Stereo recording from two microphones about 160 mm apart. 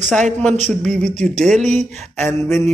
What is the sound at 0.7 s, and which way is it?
A man's voice, 5° left (ahead or behind).